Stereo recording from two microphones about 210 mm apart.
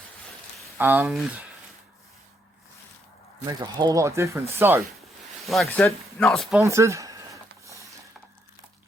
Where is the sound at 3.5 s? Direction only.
20° right (ahead or behind).